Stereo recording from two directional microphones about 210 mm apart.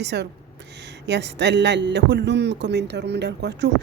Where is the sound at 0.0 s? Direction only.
55° right (ahead or behind).